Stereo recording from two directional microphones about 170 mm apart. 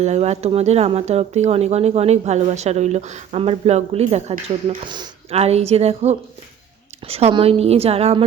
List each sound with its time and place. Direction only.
0.0 s speech: 40° right (ahead or behind)